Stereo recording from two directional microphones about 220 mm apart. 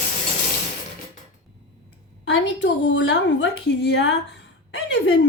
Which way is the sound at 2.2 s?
55° left (ahead or behind).